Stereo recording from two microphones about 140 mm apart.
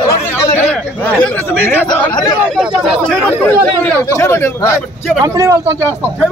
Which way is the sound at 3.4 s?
15° left (ahead or behind).